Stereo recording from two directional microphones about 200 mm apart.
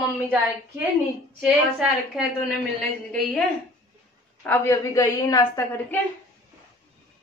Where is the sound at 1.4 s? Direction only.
5° right (ahead or behind); by 5.4 s 15° left (ahead or behind).